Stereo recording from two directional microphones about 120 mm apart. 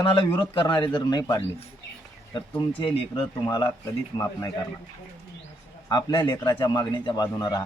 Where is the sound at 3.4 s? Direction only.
30° left (ahead or behind).